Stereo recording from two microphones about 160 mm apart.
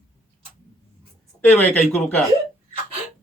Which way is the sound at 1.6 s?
10° left (ahead or behind).